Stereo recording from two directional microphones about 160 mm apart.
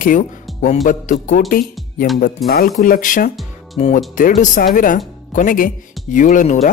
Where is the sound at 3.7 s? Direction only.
45° left (ahead or behind).